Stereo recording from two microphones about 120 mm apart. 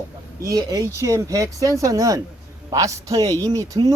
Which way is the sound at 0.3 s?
25° right (ahead or behind).